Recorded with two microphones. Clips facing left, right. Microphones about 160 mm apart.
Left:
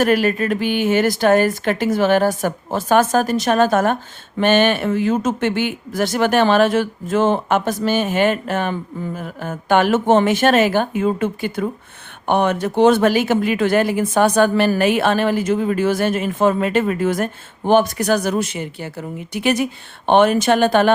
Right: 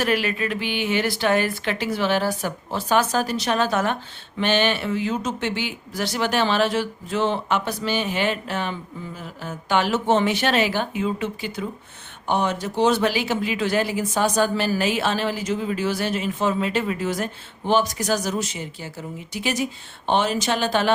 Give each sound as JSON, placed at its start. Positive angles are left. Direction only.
{"t": 0.0, "sound": "speech", "side_deg": 45}